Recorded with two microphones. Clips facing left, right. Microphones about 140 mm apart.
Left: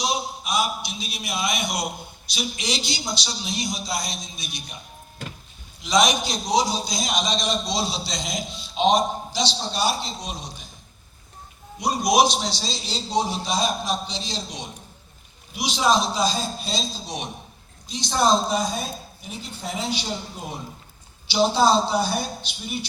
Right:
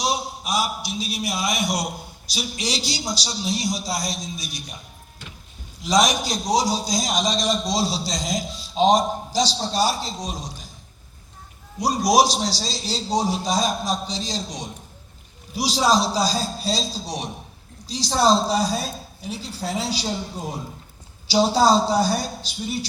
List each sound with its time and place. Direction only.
0.4 s a man's voice: 35° right (ahead or behind)
5.8 s a man's voice: 40° right (ahead or behind)
11.8 s a man's voice: 35° right (ahead or behind)
21.2 s a man's voice: 40° right (ahead or behind)